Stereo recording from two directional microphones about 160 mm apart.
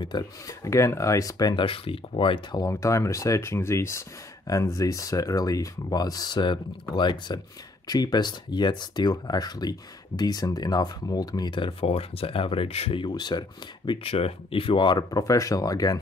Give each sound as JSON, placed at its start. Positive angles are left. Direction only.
{"t": 0.0, "sound": "speech", "side_deg": 25}